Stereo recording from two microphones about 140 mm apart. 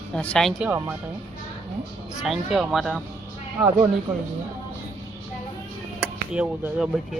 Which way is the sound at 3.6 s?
10° right (ahead or behind).